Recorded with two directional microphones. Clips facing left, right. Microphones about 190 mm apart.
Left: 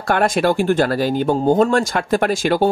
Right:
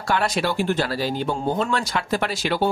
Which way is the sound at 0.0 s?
50° left (ahead or behind).